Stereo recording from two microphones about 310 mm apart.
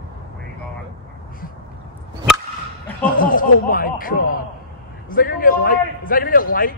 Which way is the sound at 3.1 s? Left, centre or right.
Left.